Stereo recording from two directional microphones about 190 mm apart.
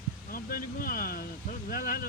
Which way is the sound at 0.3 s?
50° left (ahead or behind).